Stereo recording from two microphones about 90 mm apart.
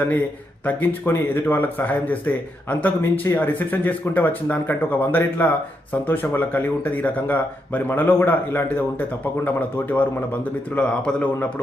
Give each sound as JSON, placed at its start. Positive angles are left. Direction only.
{"t": 0.6, "sound": "speech", "side_deg": 20}